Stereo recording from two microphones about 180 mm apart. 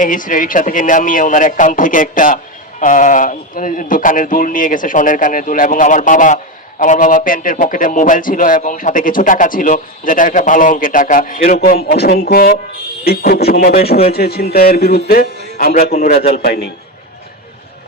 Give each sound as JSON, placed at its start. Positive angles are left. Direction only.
{"t": 0.0, "sound": "a man's voice", "side_deg": 50}
{"t": 15.9, "sound": "a man's voice", "side_deg": 40}